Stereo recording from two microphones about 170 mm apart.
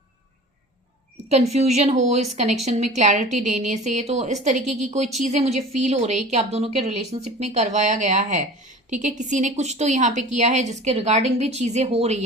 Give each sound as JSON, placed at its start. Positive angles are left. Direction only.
{"t": 1.3, "sound": "a woman's voice", "side_deg": -40}